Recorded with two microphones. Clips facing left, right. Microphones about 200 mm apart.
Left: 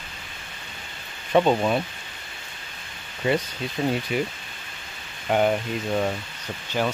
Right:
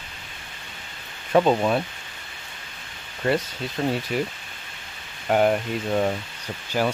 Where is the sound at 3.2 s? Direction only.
10° left (ahead or behind).